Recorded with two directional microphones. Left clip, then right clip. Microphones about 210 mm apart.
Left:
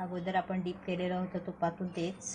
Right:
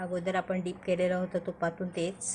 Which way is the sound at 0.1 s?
35° right (ahead or behind).